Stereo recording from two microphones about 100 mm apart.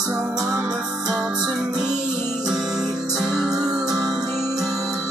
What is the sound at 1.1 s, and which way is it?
Music, 5° right (ahead or behind).